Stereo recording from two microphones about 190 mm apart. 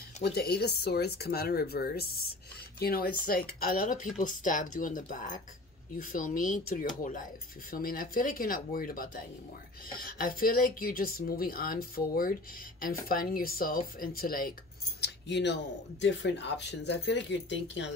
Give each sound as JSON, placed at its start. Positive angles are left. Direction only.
{"t": 0.2, "sound": "speech", "side_deg": 60}
{"t": 15.0, "sound": "speech", "side_deg": 65}